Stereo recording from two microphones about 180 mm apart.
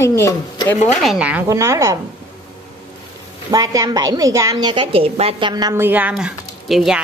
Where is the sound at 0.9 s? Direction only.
5° right (ahead or behind).